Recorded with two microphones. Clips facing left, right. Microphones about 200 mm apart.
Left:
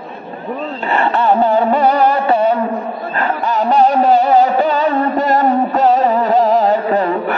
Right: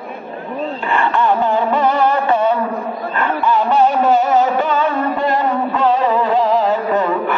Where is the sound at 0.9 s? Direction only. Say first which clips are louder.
Left 3 dB; 35° left (ahead or behind).